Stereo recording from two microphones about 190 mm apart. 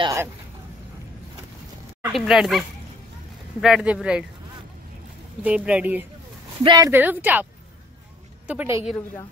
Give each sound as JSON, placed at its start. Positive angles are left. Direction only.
{"t": 0.0, "sound": "a sound", "side_deg": -15}
{"t": 2.1, "sound": "speech", "side_deg": 0}
{"t": 3.6, "sound": "speech", "side_deg": -5}
{"t": 5.4, "sound": "speech", "side_deg": -5}
{"t": 6.6, "sound": "speech", "side_deg": -20}
{"t": 6.9, "sound": "speech", "side_deg": -10}
{"t": 8.5, "sound": "speech", "side_deg": -10}